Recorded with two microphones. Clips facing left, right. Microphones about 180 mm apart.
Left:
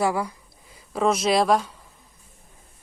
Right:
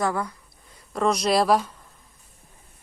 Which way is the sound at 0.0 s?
10° left (ahead or behind).